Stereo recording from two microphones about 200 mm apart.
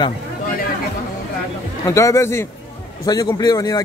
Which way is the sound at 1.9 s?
15° left (ahead or behind).